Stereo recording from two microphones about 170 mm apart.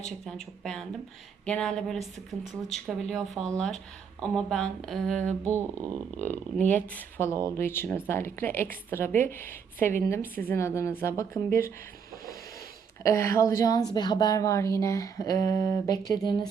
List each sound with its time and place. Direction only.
0.3 s speech: 5° left (ahead or behind)
5.4 s speech: 15° right (ahead or behind)
6.6 s a woman's voice: 10° left (ahead or behind)
13.0 s a woman's voice: 15° left (ahead or behind)